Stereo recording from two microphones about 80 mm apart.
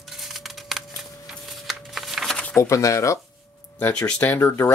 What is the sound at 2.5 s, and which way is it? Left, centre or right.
Speech, left.